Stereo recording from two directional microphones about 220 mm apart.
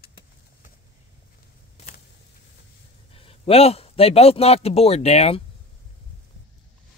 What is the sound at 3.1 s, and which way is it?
A man's voice, 25° left (ahead or behind).